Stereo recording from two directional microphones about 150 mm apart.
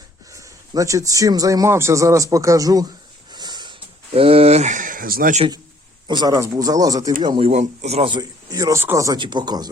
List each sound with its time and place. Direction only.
0.3 s speech: 20° right (ahead or behind)
3.3 s a sound: 30° right (ahead or behind); by 5.3 s 75° right (ahead or behind)
6.1 s speech: 25° right (ahead or behind)
7.4 s speech: 50° right (ahead or behind)
8.1 s speech: 25° right (ahead or behind)
9.1 s speech: 30° right (ahead or behind)